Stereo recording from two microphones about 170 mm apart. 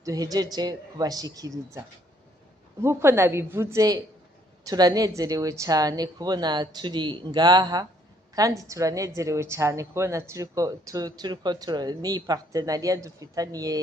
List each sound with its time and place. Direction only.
0.0 s a woman's voice: 20° right (ahead or behind)